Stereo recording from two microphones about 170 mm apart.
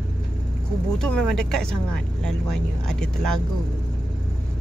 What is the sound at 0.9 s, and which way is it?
Speech, 5° left (ahead or behind).